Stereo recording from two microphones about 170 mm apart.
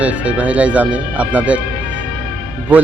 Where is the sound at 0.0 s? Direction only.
10° right (ahead or behind).